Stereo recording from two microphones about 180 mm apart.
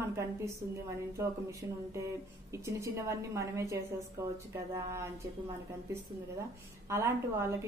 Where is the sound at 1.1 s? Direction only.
15° right (ahead or behind).